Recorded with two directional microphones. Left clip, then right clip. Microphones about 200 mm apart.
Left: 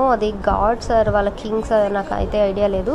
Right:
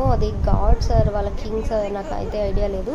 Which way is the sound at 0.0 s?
15° left (ahead or behind).